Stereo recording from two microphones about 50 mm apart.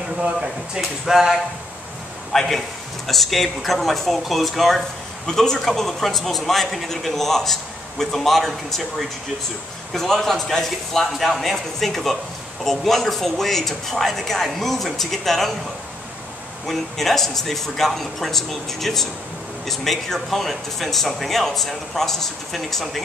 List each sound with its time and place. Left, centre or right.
0.2 s speech: centre
2.3 s a man's voice: centre
16.6 s speech: centre